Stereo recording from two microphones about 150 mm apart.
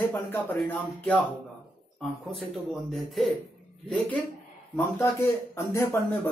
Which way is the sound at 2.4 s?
Centre (ahead or behind).